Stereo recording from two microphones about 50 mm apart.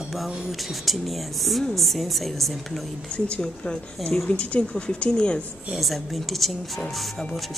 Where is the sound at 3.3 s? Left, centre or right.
Centre.